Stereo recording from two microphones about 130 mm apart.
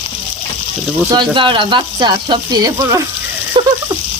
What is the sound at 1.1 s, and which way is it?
Speech, 35° right (ahead or behind).